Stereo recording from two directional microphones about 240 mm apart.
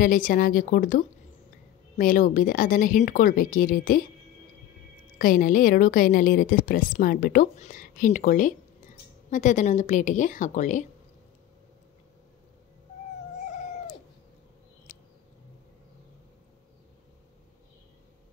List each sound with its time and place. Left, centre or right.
0.0 s a woman's voice: left
5.2 s a woman's voice: left
14.9 s a sound: left